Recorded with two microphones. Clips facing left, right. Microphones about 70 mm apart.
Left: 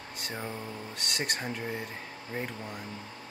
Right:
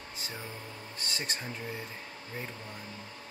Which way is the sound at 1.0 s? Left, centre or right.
Left.